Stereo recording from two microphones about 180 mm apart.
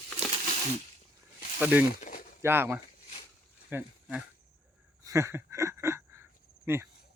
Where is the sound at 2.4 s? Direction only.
10° right (ahead or behind).